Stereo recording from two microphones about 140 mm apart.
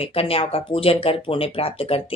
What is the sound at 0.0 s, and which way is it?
A woman's voice, 45° left (ahead or behind).